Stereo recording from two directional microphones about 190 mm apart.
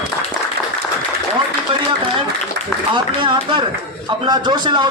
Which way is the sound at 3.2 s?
25° right (ahead or behind).